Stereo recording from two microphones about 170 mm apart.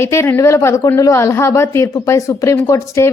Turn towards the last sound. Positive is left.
turn(degrees=15)  # may be behind; listen again after turning